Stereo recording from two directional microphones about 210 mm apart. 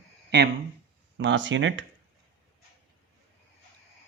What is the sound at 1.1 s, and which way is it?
Speech, 60° right (ahead or behind).